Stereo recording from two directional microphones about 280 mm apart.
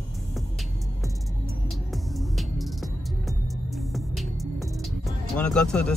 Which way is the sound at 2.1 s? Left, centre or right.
Centre.